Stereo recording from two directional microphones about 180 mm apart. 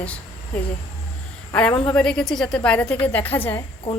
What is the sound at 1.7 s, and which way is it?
Speech, 30° left (ahead or behind).